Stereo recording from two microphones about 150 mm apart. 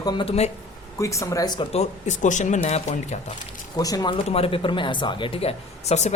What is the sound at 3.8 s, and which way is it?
Speech, 25° left (ahead or behind).